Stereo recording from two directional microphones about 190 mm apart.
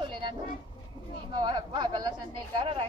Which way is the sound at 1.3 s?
25° right (ahead or behind).